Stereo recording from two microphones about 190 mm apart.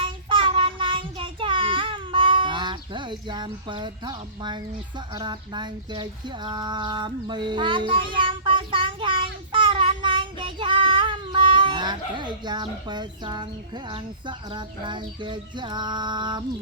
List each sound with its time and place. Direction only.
0.0 s child singing: 25° right (ahead or behind)